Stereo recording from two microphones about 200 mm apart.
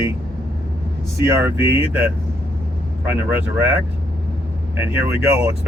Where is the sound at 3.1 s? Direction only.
10° right (ahead or behind).